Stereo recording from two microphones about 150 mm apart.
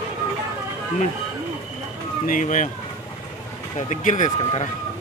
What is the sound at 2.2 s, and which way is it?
Speech, 65° left (ahead or behind).